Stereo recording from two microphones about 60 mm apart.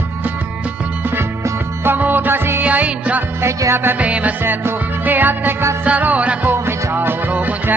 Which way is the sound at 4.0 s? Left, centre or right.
Right.